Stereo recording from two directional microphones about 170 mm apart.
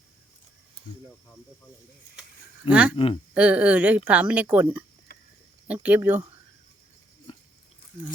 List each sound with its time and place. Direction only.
2.6 s a woman's voice: 10° right (ahead or behind)
2.9 s speech: 30° left (ahead or behind)
3.3 s a woman's voice: 10° right (ahead or behind)